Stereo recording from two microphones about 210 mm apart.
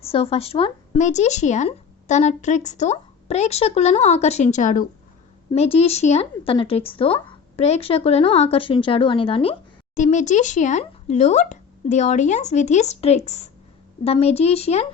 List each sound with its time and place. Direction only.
0.0 s speech: 25° left (ahead or behind)
5.5 s speech: 30° left (ahead or behind)